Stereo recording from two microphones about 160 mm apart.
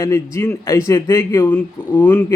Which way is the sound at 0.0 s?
15° left (ahead or behind).